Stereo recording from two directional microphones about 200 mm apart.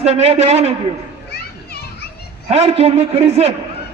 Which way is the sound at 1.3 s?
50° left (ahead or behind).